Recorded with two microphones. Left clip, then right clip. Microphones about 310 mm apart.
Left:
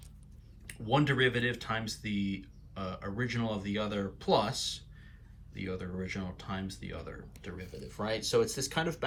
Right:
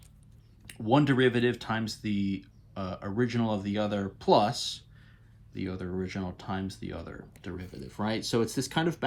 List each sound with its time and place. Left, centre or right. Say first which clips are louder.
0.7 s speech: right 4 dB; centre